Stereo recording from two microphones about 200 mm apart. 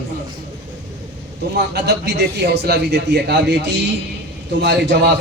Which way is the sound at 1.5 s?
55° right (ahead or behind).